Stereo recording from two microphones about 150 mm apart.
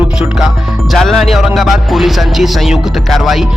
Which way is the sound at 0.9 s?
Centre (ahead or behind).